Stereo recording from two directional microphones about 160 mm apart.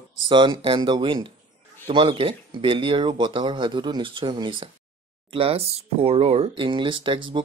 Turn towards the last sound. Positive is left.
turn(degrees=-30)  # may be behind; listen again after turning